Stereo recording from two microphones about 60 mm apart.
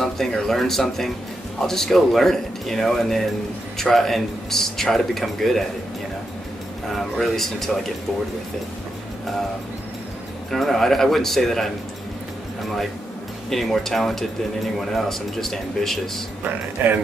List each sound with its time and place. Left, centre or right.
0.0 s speech: centre
7.0 s speech: centre
10.5 s speech: centre
13.5 s speech: centre
16.4 s speech: right